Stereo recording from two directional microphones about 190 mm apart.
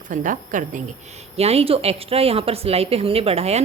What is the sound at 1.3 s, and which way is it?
A woman's voice, 30° right (ahead or behind).